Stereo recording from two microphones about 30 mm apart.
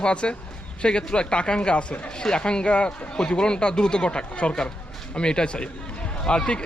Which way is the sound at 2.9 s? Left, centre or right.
Left.